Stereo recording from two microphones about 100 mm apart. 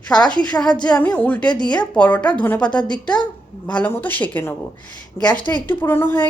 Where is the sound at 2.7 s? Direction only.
45° left (ahead or behind).